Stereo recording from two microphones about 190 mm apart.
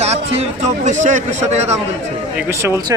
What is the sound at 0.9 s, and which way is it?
Speech, 40° right (ahead or behind).